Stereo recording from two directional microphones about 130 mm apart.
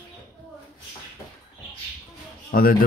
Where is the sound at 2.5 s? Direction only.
90° left.